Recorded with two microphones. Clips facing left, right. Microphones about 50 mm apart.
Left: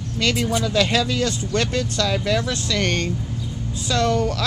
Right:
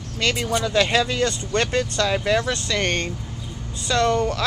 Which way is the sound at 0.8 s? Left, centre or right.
Centre.